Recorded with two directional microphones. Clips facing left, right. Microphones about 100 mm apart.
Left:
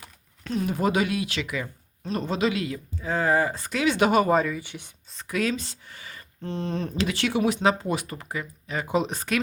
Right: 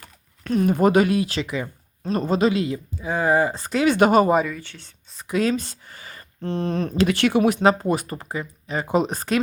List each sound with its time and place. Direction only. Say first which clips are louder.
0.4 s speech: right 7 dB; 50° right (ahead or behind); by 1.7 s 30° right (ahead or behind)
2.0 s speech: right 5 dB; 40° right (ahead or behind); by 2.8 s 25° right (ahead or behind)
3.0 s speech: right 3 dB; 15° right (ahead or behind)
3.6 s speech: right 6 dB; 35° right (ahead or behind)
3.8 s speech: right 5 dB; 50° right (ahead or behind)
4.6 s speech: left 3 dB; 15° left (ahead or behind)
5.3 s speech: right 5 dB; 30° right (ahead or behind)
5.5 s speech: right 7 dB; 45° right (ahead or behind)
6.4 s speech: right 5 dB; 60° right (ahead or behind); by 9.3 s 40° right (ahead or behind)